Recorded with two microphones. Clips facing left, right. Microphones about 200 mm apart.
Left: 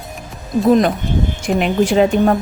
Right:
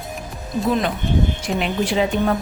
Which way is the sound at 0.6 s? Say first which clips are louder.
Left 8 dB; 40° left (ahead or behind).